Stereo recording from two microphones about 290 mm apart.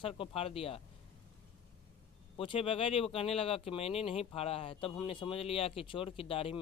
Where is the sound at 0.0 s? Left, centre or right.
Centre.